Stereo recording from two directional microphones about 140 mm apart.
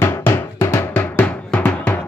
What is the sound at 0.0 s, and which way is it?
Drum, 15° left (ahead or behind).